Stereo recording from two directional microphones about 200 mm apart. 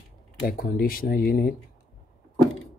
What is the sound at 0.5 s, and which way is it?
Speech, 45° left (ahead or behind).